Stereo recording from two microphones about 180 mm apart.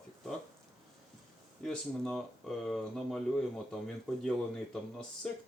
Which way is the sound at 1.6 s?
5° left (ahead or behind).